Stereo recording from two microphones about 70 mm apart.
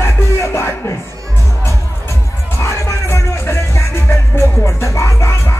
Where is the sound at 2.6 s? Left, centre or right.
Left.